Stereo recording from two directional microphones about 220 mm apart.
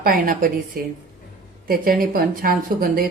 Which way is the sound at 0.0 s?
40° right (ahead or behind).